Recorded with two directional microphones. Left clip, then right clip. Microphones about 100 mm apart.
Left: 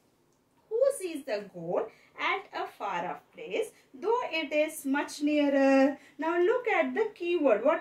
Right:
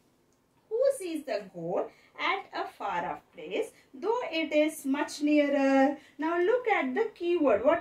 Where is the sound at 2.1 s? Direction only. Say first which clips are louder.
Right 1 dB; 30° right (ahead or behind).